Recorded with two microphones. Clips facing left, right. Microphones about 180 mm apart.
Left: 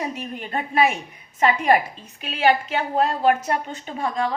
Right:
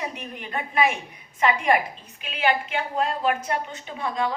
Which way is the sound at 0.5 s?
40° left (ahead or behind).